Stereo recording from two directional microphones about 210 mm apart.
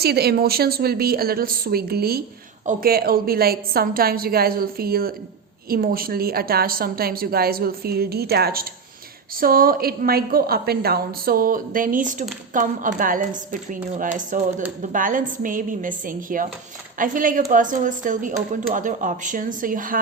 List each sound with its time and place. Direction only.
0.0 s a woman's voice: 50° right (ahead or behind)